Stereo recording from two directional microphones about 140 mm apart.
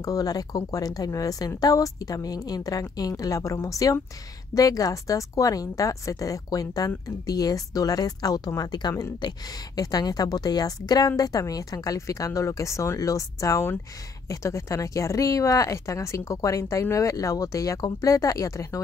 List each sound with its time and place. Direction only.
0.0 s speech: 25° left (ahead or behind)